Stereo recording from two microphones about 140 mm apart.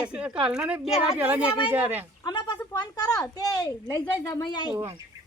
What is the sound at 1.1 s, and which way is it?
Speech, 10° right (ahead or behind).